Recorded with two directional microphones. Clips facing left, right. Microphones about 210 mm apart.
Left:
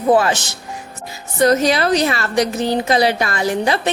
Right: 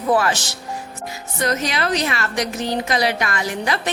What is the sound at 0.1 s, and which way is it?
A woman's voice, 25° left (ahead or behind).